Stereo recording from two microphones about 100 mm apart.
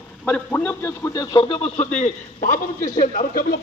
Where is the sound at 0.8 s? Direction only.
30° left (ahead or behind).